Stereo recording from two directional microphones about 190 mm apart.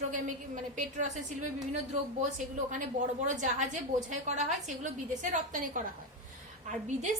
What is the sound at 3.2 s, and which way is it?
A woman's voice, 40° right (ahead or behind).